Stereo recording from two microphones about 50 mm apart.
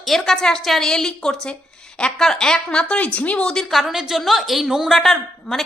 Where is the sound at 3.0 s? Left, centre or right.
Left.